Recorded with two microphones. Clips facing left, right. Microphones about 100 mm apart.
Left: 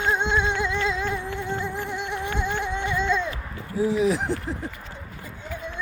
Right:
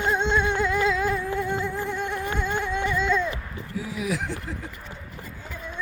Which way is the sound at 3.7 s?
30° left (ahead or behind).